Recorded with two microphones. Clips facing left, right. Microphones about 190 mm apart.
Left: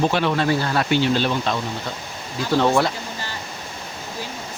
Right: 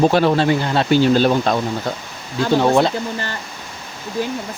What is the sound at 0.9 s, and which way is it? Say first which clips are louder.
Speech: right 8 dB; 45° right (ahead or behind).